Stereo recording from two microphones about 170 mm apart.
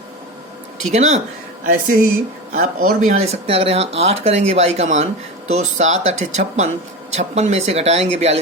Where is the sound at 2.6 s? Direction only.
45° right (ahead or behind).